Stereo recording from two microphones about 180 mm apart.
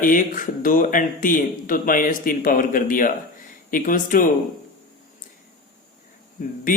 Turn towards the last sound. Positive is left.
turn(degrees=50)  # may be behind; listen again after turning